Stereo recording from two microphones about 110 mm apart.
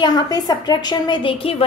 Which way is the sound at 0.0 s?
35° left (ahead or behind).